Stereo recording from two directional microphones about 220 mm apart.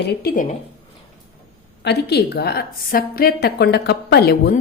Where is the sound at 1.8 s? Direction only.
50° left (ahead or behind).